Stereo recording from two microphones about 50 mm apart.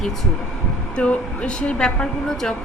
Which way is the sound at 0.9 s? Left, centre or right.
Left.